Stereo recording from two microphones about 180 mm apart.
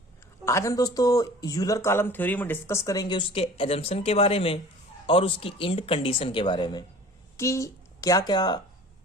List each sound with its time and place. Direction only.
0.4 s speech: 15° left (ahead or behind)
7.3 s a woman's voice: 15° left (ahead or behind)